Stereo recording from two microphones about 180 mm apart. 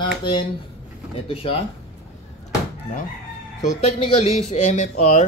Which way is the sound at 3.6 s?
40° left (ahead or behind).